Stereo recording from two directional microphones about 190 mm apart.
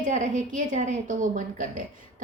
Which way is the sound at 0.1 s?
40° right (ahead or behind).